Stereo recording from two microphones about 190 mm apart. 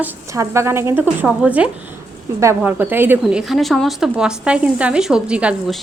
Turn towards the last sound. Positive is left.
turn(degrees=0)  # may be behind; listen again after turning